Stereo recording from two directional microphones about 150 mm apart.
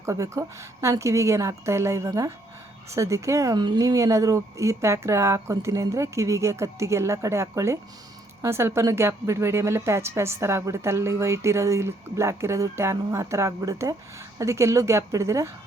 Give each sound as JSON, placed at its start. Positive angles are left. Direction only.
{"t": 0.0, "sound": "a woman's voice", "side_deg": -20}